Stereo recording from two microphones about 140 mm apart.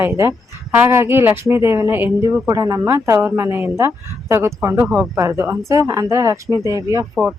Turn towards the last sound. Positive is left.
turn(degrees=-20)  # may be behind; listen again after turning